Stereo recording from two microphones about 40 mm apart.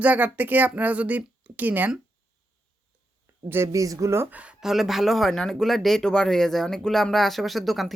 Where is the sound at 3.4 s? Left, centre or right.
Right.